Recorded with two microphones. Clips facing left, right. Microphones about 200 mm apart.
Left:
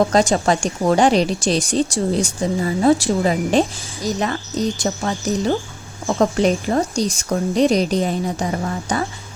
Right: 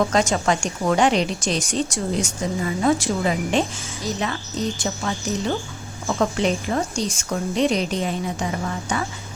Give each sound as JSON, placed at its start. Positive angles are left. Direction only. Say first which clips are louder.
{"t": 0.0, "sound": "a woman's voice", "louder": "left 4 dB", "side_deg": 35}
{"t": 4.8, "sound": "a woman's voice", "louder": "left 4 dB", "side_deg": 35}